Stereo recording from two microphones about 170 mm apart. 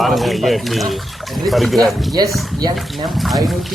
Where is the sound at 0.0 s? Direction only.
Centre (ahead or behind).